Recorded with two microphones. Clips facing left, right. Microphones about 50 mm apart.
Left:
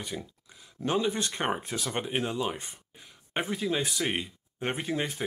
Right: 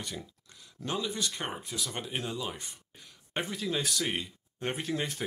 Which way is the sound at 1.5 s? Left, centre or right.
Left.